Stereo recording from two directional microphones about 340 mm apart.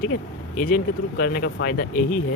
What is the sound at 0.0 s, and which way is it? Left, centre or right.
Speech, left.